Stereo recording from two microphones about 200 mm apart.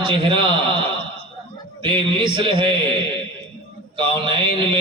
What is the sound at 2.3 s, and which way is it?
Speech, 25° right (ahead or behind).